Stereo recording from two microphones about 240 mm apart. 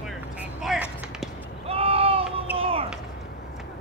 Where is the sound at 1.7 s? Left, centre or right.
Right.